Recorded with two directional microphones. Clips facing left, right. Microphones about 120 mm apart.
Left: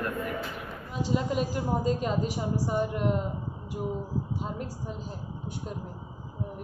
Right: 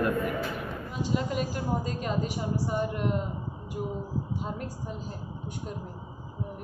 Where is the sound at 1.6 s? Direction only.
20° left (ahead or behind).